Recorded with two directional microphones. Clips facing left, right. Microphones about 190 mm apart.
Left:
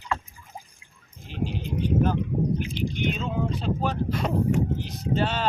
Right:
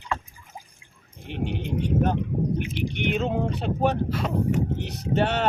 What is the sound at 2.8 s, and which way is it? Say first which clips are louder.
Speech: right 2 dB; 65° right (ahead or behind).